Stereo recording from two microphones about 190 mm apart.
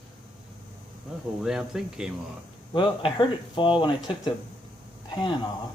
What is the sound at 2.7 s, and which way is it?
Speech, 25° left (ahead or behind).